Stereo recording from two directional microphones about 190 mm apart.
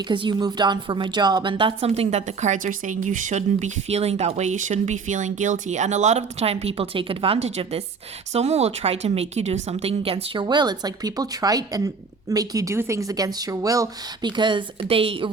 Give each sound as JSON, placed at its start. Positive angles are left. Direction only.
{"t": 0.1, "sound": "a woman's voice", "side_deg": -25}